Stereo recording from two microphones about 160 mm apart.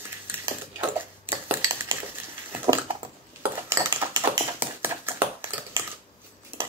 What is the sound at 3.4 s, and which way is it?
Cutlery, 15° right (ahead or behind).